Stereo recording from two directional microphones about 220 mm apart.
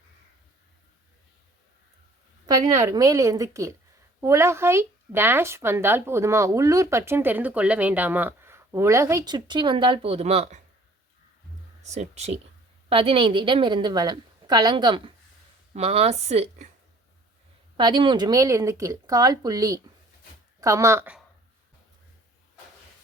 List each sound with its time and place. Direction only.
2.5 s speech: 15° right (ahead or behind)
11.9 s a woman's voice: 30° right (ahead or behind)
17.7 s speech: 20° right (ahead or behind)